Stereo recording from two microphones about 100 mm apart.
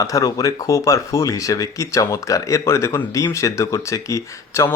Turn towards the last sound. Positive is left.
turn(degrees=30)  # may be behind; listen again after turning